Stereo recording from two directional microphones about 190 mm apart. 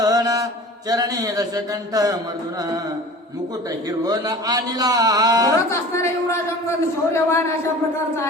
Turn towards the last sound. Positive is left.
turn(degrees=15)  # may be behind; listen again after turning